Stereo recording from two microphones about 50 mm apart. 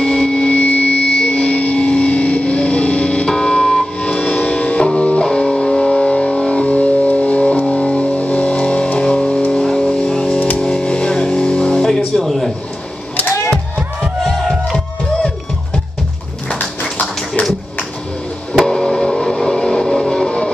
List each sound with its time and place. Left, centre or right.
0.0 s a sound: centre
0.5 s vehicle: left
3.3 s music: centre
9.5 s vehicle: centre
10.6 s music: centre
12.2 s a sound: centre
14.2 s music: centre
18.5 s vehicle: centre